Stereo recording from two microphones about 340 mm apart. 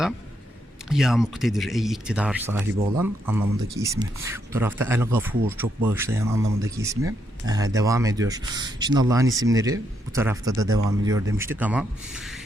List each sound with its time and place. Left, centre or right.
0.9 s speech: centre